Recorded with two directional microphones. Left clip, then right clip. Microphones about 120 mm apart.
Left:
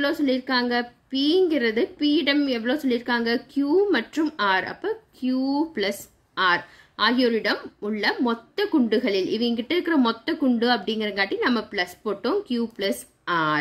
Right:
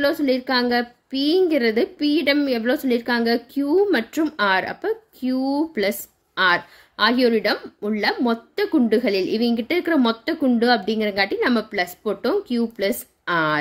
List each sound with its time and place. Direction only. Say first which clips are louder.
0.0 s a woman's voice: right 3 dB; 30° right (ahead or behind)